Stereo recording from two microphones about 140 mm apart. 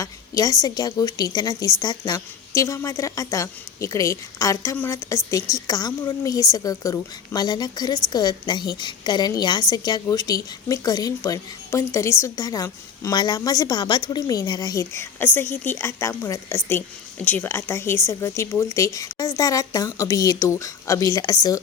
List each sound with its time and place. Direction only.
0.0 s a woman's voice: 25° left (ahead or behind)